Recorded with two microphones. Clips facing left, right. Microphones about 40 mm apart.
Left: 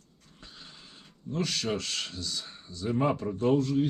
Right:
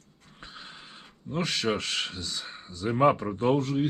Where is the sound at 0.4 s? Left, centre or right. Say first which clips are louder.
Right 5 dB; right.